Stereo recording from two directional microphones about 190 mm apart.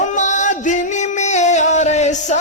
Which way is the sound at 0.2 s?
40° left (ahead or behind).